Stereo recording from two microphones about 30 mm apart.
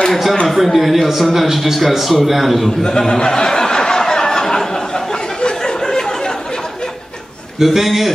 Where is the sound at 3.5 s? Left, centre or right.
Left.